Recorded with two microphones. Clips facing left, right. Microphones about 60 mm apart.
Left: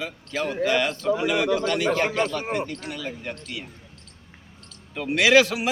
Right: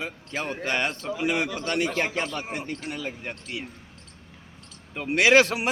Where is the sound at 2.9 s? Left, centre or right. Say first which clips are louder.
Left 1 dB; right.